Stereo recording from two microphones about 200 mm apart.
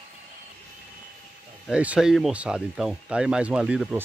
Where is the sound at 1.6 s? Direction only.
5° right (ahead or behind).